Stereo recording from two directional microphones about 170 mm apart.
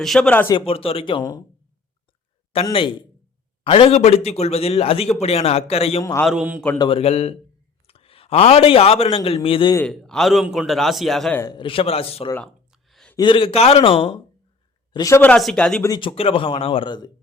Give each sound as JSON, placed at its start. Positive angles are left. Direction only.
{"t": 0.0, "sound": "a man's voice", "side_deg": 5}
{"t": 0.4, "sound": "a man's voice", "side_deg": 30}
{"t": 2.6, "sound": "a man's voice", "side_deg": 30}
{"t": 6.0, "sound": "speech", "side_deg": 20}
{"t": 6.2, "sound": "speech", "side_deg": -5}
{"t": 6.7, "sound": "a man's voice", "side_deg": 30}
{"t": 9.8, "sound": "a man's voice", "side_deg": 5}
{"t": 11.3, "sound": "a man's voice", "side_deg": 25}
{"t": 12.5, "sound": "a sound", "side_deg": 0}
{"t": 13.1, "sound": "a man's voice", "side_deg": 30}
{"t": 14.9, "sound": "a man's voice", "side_deg": 20}
{"t": 15.2, "sound": "speech", "side_deg": 5}
{"t": 15.9, "sound": "a man's voice", "side_deg": 30}